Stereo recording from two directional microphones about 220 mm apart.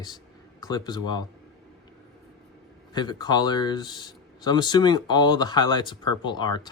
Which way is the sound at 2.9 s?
20° left (ahead or behind).